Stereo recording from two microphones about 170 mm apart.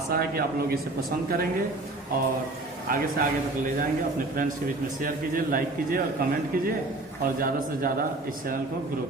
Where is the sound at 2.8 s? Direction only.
55° right (ahead or behind).